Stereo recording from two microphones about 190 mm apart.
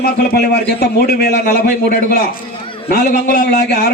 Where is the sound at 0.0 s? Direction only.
55° left (ahead or behind).